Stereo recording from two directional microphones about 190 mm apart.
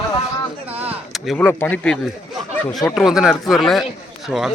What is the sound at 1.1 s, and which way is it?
Speech, centre (ahead or behind).